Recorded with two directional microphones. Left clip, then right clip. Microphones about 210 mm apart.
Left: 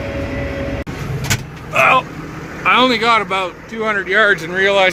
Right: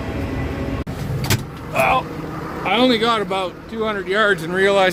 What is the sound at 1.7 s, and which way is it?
Vehicle, centre (ahead or behind).